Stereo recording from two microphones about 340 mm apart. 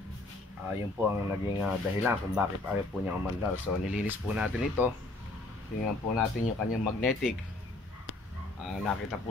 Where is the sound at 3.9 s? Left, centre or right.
Centre.